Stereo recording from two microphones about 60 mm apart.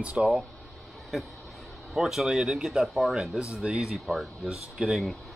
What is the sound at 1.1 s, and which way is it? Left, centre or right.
Speech, centre.